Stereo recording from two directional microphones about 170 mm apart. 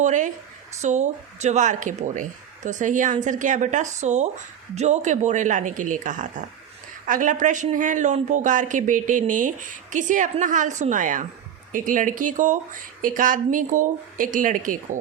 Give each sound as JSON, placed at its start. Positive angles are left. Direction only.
{"t": 0.0, "sound": "speech", "side_deg": -45}